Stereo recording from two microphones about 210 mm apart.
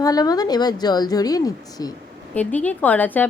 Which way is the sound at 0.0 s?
20° left (ahead or behind).